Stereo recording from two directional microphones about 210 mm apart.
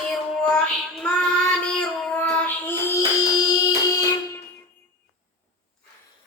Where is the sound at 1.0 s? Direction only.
5° left (ahead or behind).